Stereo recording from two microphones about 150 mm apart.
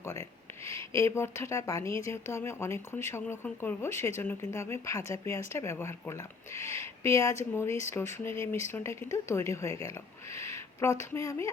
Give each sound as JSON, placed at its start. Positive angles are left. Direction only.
{"t": 0.6, "sound": "speech", "side_deg": 20}
{"t": 10.3, "sound": "a sound", "side_deg": 20}
{"t": 11.1, "sound": "speech", "side_deg": 20}